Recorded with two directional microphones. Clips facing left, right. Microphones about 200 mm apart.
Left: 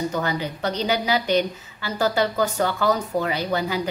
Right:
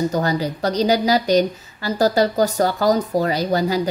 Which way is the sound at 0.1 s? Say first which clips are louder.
Right 5 dB; 40° right (ahead or behind).